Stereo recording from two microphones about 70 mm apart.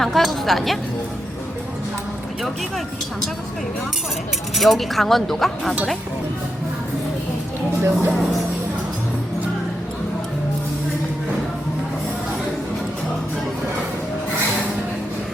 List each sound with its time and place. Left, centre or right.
0.0 s speech: centre
2.4 s speech: centre
4.5 s speech: centre
7.8 s speech: right